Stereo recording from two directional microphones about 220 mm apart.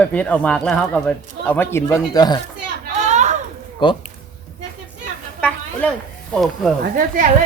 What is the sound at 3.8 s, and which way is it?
Speech, 20° left (ahead or behind).